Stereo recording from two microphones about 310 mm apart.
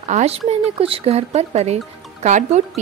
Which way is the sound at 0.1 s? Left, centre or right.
Right.